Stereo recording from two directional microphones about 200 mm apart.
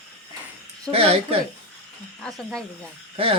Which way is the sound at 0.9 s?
30° right (ahead or behind).